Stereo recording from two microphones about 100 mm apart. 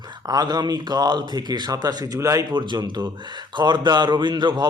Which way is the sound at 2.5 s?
50° right (ahead or behind).